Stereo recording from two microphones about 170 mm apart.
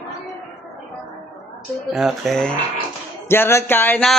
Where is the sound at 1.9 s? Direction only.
Centre (ahead or behind).